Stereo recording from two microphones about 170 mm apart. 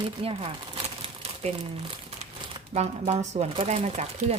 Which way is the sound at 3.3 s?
40° right (ahead or behind).